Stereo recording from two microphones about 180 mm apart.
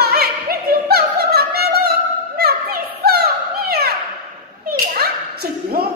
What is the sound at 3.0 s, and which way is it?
Opera, 60° right (ahead or behind).